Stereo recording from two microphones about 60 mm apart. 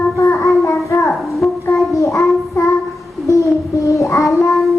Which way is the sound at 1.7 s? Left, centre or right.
Left.